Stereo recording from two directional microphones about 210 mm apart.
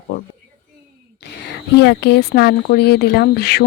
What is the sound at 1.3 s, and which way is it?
Speech, 55° left (ahead or behind).